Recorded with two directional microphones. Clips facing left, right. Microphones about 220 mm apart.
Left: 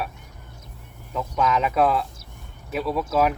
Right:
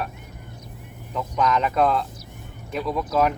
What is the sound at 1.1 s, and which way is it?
Speech, 5° left (ahead or behind).